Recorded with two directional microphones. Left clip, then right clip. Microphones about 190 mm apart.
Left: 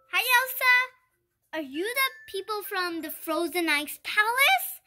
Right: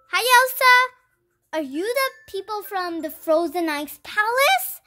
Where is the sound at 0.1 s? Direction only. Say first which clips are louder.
Right 7 dB; 55° right (ahead or behind).